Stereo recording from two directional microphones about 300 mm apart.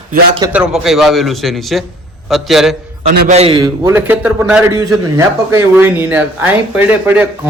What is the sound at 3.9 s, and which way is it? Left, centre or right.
A man's voice, centre.